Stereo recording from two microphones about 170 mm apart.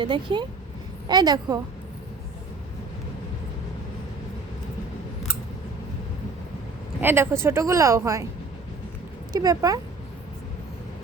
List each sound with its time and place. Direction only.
0.0 s a woman's voice: 30° right (ahead or behind)
7.0 s a woman's voice: 15° right (ahead or behind)
9.3 s a woman's voice: 20° right (ahead or behind)